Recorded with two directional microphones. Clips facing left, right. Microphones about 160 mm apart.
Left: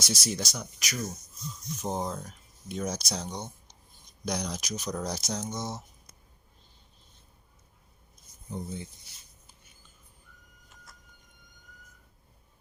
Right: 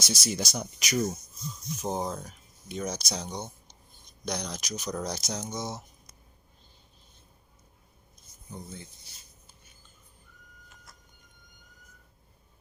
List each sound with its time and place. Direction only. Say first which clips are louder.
0.0 s speech: right 1 dB; centre (ahead or behind)
0.5 s speech: right 5 dB; 20° right (ahead or behind)
1.8 s speech: right 1 dB; centre (ahead or behind)
8.5 s speech: left 6 dB; 20° left (ahead or behind)